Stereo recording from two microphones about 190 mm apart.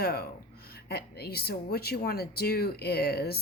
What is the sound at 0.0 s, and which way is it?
Speech, 55° left (ahead or behind).